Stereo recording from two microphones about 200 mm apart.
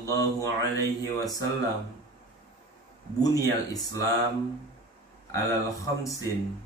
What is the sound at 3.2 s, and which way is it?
Speech, 15° left (ahead or behind).